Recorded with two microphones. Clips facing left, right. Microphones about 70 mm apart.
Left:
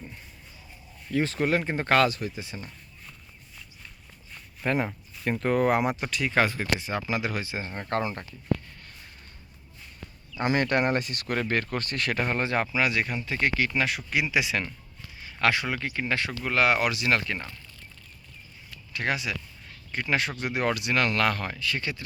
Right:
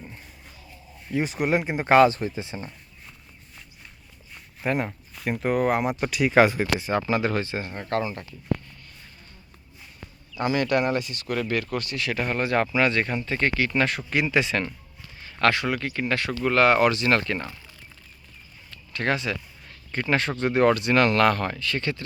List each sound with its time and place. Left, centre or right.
1.0 s speech: centre
4.6 s speech: centre
6.1 s speech: centre
6.7 s speech: centre
7.6 s speech: left
8.0 s speech: left
10.4 s speech: left
11.3 s speech: left
12.3 s speech: left
16.4 s speech: centre
18.7 s a sound: centre
19.9 s speech: centre